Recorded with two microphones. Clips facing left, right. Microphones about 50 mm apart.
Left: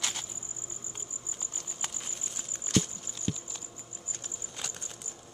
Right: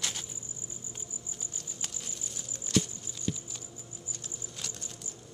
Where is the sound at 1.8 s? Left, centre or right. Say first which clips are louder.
Left 3 dB; left.